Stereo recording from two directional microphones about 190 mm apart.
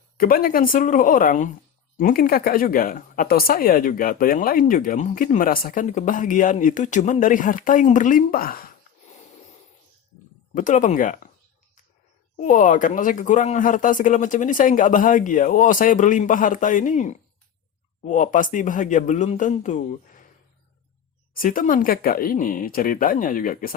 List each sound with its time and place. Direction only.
0.2 s speech: 50° left (ahead or behind)
10.5 s speech: 45° left (ahead or behind)
12.4 s speech: 40° left (ahead or behind)
21.3 s speech: 45° left (ahead or behind)